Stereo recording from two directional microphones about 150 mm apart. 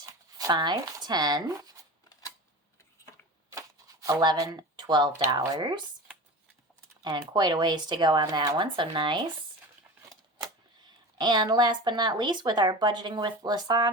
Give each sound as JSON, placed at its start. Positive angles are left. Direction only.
{"t": 0.0, "sound": "speech", "side_deg": -25}
{"t": 3.5, "sound": "shuffling cards", "side_deg": -20}
{"t": 5.2, "sound": "speech", "side_deg": -20}
{"t": 7.3, "sound": "speech", "side_deg": -30}
{"t": 11.2, "sound": "speech", "side_deg": -30}